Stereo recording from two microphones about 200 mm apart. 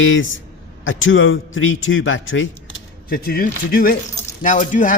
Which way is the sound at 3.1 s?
50° left (ahead or behind).